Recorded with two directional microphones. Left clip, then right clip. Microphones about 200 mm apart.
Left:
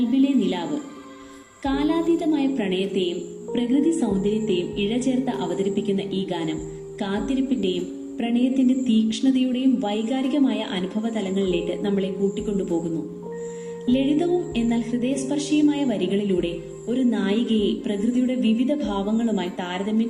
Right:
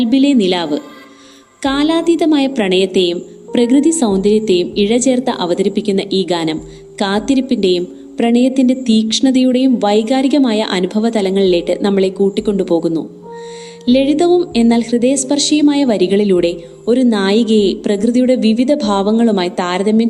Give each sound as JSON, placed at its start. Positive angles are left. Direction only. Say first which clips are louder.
{"t": 0.1, "sound": "a woman's voice", "louder": "right 12 dB", "side_deg": -50}
{"t": 13.8, "sound": "a woman's voice", "louder": "right 10 dB", "side_deg": -45}